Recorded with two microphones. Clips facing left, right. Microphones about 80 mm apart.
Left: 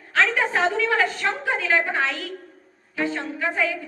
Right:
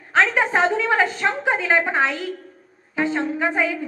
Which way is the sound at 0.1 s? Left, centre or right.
Right.